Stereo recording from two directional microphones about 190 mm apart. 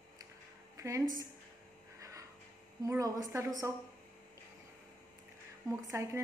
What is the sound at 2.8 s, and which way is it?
Speech, 15° right (ahead or behind).